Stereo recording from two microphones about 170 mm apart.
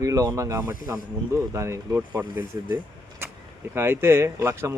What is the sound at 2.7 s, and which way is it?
Vehicle, 15° right (ahead or behind).